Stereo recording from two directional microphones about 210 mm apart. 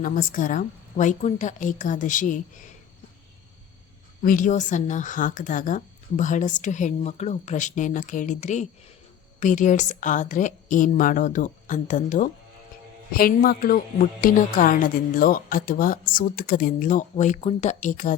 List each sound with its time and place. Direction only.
0.0 s a woman's voice: 40° left (ahead or behind)
4.2 s a woman's voice: 40° left (ahead or behind)